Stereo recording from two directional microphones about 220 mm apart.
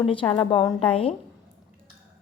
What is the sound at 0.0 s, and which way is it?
Speech, 25° left (ahead or behind).